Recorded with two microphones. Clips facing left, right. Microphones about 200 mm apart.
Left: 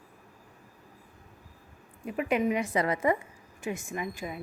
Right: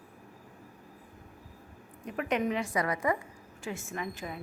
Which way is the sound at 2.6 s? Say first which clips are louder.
Left 3 dB; 25° left (ahead or behind).